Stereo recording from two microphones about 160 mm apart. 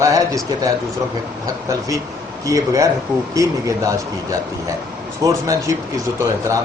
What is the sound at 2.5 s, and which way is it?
Speech, 20° right (ahead or behind).